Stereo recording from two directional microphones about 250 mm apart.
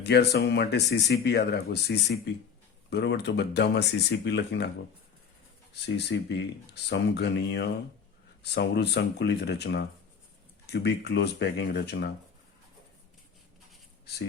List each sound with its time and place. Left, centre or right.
0.0 s speech: left
5.8 s speech: left